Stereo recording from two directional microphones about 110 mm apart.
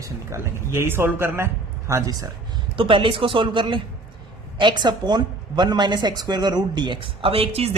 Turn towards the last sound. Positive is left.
turn(degrees=-65)  # may be behind; listen again after turning